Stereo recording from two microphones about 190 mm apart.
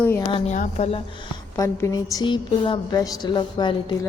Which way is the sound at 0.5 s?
40° left (ahead or behind).